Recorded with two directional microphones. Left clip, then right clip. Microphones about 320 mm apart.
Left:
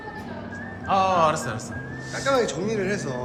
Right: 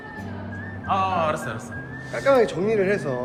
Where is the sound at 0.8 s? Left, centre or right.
Centre.